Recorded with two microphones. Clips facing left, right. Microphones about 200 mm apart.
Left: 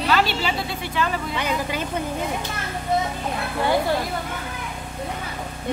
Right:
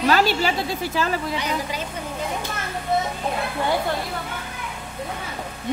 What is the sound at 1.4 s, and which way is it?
Speech, 55° left (ahead or behind).